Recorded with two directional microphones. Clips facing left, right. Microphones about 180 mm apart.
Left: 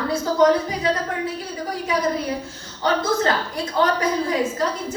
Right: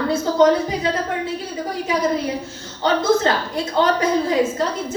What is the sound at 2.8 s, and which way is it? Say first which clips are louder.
A child's voice: right 3 dB; 25° right (ahead or behind).